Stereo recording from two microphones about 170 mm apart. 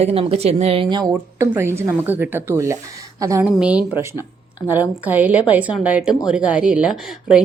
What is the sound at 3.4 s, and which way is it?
A woman's voice, 5° right (ahead or behind).